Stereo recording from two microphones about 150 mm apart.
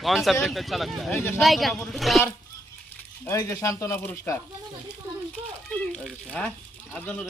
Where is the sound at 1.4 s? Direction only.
Centre (ahead or behind).